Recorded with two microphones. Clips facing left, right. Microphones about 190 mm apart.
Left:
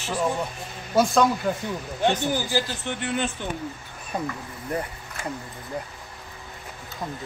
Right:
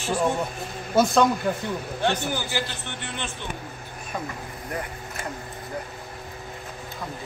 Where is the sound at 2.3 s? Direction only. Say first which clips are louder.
Left 3 dB; 40° left (ahead or behind).